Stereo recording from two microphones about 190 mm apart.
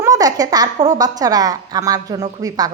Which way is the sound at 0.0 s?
20° right (ahead or behind).